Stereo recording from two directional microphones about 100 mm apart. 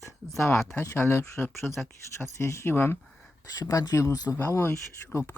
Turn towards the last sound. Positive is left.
turn(degrees=30)  # may be behind; listen again after turning